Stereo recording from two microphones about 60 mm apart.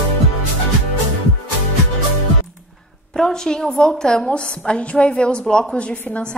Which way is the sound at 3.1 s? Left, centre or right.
Centre.